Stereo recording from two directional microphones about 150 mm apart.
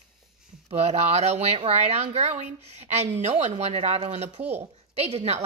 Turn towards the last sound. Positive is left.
turn(degrees=-45)  # may be behind; listen again after turning